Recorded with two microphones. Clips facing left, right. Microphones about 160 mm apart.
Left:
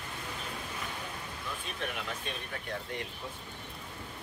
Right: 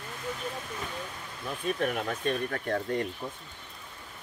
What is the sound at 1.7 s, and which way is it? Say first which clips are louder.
Speech: right 8 dB; 50° right (ahead or behind).